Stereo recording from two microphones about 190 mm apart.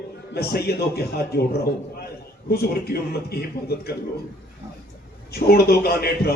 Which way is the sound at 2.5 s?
55° left (ahead or behind).